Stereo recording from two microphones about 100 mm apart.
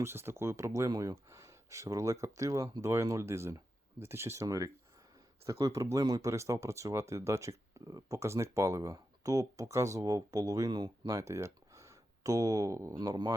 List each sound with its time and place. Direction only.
0.0 s speech: 25° right (ahead or behind); by 13.3 s 40° right (ahead or behind)